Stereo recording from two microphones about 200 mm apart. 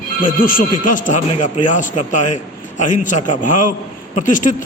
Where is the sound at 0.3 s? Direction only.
45° left (ahead or behind).